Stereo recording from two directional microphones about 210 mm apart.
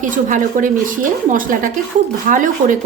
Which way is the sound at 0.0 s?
40° right (ahead or behind).